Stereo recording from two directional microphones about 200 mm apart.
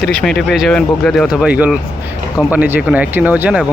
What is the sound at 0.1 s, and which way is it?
Speech, 5° left (ahead or behind).